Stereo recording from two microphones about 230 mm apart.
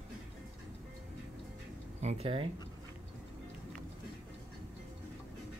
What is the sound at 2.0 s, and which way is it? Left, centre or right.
Speech, right.